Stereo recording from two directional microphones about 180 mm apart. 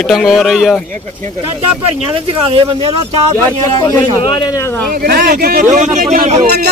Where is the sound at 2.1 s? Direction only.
30° right (ahead or behind).